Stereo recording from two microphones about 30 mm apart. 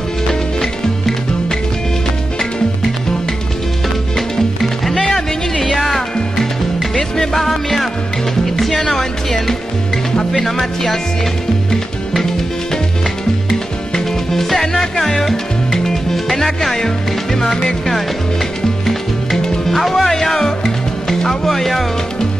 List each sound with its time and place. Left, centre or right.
0.3 s music: centre
4.4 s music: centre
10.4 s speech: centre
13.9 s music: centre
16.3 s music: centre
16.7 s speech: centre
19.7 s speech: centre
20.3 s music: centre